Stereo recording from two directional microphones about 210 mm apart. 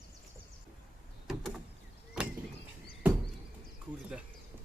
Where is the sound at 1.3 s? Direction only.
Centre (ahead or behind).